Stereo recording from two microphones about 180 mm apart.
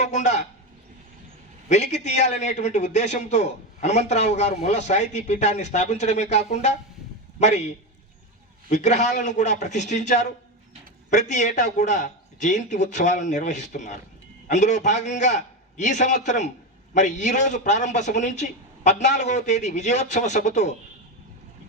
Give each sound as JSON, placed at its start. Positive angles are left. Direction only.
{"t": 0.0, "sound": "a man's voice", "side_deg": 40}
{"t": 1.7, "sound": "a man's voice", "side_deg": 40}
{"t": 8.7, "sound": "a man's voice", "side_deg": 40}